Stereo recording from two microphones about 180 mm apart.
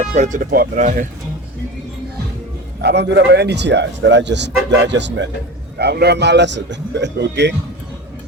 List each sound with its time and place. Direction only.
0.0 s speech: 40° right (ahead or behind)
2.8 s speech: 70° right (ahead or behind)
5.7 s speech: 65° right (ahead or behind)